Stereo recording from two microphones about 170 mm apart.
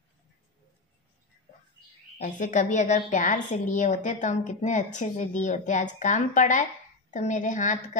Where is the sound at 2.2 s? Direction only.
50° left (ahead or behind).